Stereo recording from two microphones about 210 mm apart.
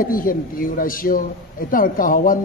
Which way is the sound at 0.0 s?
40° left (ahead or behind).